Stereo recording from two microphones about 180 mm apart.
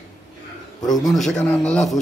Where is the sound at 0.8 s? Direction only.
20° left (ahead or behind).